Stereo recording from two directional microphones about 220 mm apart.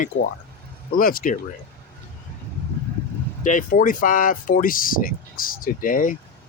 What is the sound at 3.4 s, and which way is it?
Speech, 35° left (ahead or behind).